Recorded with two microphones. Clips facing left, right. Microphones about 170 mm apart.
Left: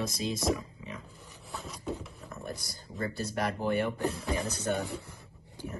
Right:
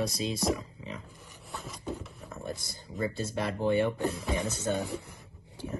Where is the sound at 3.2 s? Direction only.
25° right (ahead or behind).